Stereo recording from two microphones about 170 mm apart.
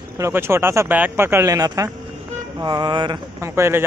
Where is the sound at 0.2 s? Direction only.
15° right (ahead or behind).